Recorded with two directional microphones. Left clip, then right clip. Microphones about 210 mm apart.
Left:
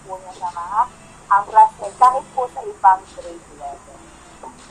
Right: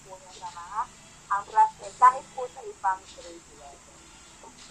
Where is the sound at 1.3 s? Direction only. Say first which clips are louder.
Left 10 dB; 20° left (ahead or behind).